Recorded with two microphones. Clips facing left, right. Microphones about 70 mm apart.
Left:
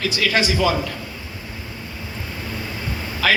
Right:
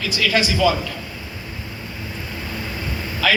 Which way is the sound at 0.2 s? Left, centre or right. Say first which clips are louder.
Right 2 dB; left.